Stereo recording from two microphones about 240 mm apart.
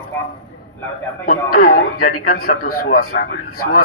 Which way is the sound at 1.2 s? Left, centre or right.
Left.